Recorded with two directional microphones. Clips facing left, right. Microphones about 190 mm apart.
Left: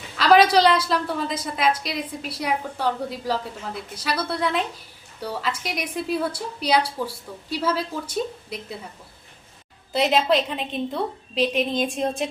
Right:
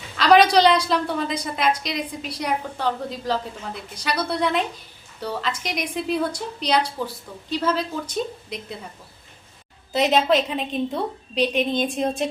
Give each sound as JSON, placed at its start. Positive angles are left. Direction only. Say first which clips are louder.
{"t": 0.2, "sound": "a woman's voice", "louder": "right 1 dB", "side_deg": 5}
{"t": 9.9, "sound": "a woman's voice", "louder": "right 1 dB", "side_deg": 0}